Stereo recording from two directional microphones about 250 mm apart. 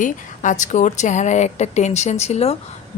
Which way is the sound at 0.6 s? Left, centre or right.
Left.